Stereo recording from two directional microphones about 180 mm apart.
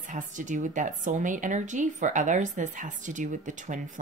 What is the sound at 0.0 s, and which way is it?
Speech, 45° right (ahead or behind).